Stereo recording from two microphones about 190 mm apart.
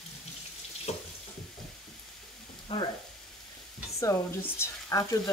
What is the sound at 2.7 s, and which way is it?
Speech, 25° left (ahead or behind).